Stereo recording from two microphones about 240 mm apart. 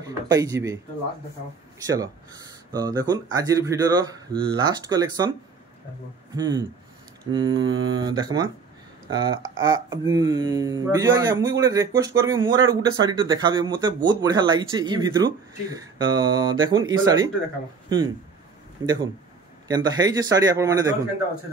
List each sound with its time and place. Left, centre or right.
0.0 s speech: centre
1.8 s speech: centre
6.3 s a man's voice: centre